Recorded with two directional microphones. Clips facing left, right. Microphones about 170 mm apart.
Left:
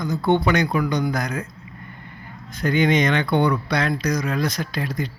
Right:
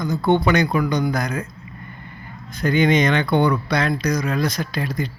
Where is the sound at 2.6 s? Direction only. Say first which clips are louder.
Right 2 dB; 35° right (ahead or behind).